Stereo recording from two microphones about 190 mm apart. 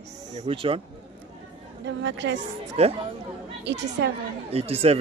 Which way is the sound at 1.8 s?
65° right (ahead or behind).